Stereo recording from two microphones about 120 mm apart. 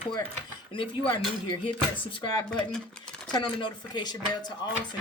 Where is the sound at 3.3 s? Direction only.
40° left (ahead or behind).